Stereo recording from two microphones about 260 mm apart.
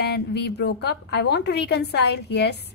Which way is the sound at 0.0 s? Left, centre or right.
Left.